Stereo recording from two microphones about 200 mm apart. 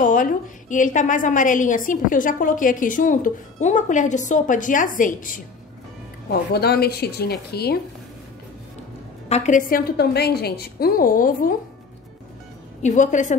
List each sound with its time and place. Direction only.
0.0 s a woman's voice: 40° left (ahead or behind)
6.5 s a woman's voice: 50° left (ahead or behind)
9.3 s a woman's voice: 35° left (ahead or behind)
12.8 s a woman's voice: 40° left (ahead or behind)